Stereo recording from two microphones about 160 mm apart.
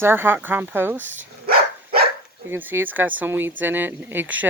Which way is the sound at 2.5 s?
10° right (ahead or behind).